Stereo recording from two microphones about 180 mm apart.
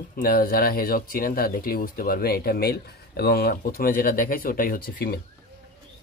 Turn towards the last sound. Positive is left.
turn(degrees=55)  # may be behind; listen again after turning